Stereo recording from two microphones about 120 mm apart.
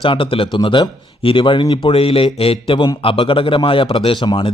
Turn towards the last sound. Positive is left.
turn(degrees=40)  # may be behind; listen again after turning